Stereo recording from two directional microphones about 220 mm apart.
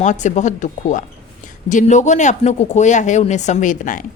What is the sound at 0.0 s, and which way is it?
A woman's voice, 35° left (ahead or behind).